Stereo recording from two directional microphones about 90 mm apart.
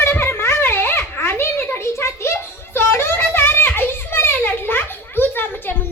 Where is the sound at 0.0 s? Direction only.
25° left (ahead or behind).